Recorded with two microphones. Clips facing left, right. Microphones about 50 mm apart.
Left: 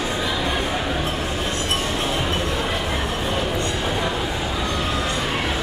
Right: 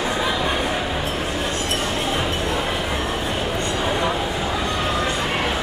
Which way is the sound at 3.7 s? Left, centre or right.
Centre.